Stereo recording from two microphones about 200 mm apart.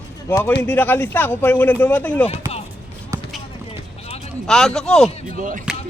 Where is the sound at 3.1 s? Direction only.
15° right (ahead or behind).